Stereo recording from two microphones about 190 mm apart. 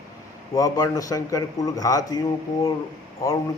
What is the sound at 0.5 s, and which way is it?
Speech, 20° left (ahead or behind).